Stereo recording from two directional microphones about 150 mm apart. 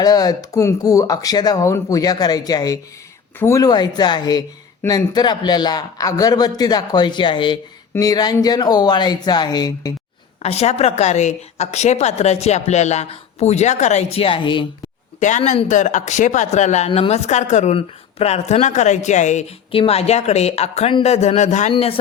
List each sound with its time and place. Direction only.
0.0 s speech: 25° left (ahead or behind)
10.4 s a woman's voice: 45° left (ahead or behind)
15.2 s a woman's voice: 55° left (ahead or behind)
15.7 s a woman's voice: 55° left (ahead or behind)
19.7 s a woman's voice: 40° left (ahead or behind)
21.7 s speech: 40° left (ahead or behind)